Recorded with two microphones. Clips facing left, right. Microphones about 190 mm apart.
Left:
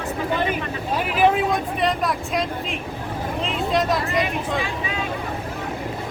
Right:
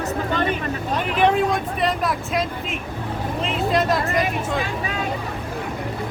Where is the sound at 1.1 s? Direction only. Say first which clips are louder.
Even; 5° left (ahead or behind).